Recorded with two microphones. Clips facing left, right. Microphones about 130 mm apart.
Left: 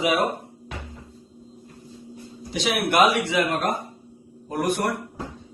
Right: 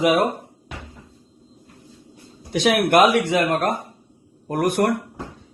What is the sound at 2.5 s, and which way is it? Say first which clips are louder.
Speech: right 7 dB; 55° right (ahead or behind).